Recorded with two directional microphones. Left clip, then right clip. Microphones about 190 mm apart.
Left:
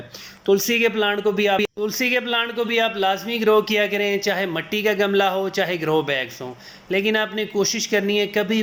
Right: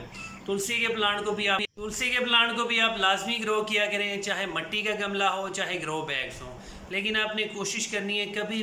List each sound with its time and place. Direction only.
0.4 s a man's voice: 30° left (ahead or behind)